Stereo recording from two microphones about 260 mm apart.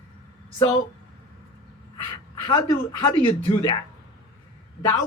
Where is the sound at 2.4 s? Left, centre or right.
Centre.